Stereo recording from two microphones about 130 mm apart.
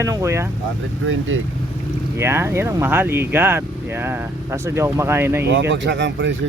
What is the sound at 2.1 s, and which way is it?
Speech, 20° right (ahead or behind).